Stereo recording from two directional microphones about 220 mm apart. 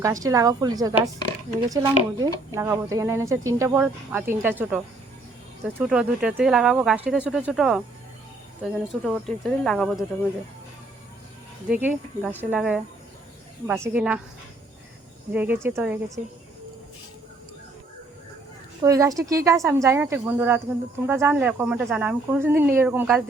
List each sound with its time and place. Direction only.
0.0 s speech: 15° right (ahead or behind); by 10.0 s centre (ahead or behind)
11.7 s speech: 5° right (ahead or behind)
13.8 s speech: 5° right (ahead or behind)
15.3 s speech: 10° right (ahead or behind)
18.8 s speech: 15° right (ahead or behind)